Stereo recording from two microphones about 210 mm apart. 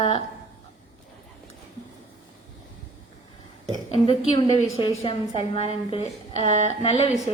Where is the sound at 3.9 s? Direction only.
25° left (ahead or behind).